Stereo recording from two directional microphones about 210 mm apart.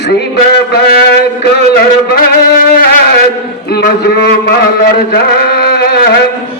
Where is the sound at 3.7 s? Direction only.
50° left (ahead or behind).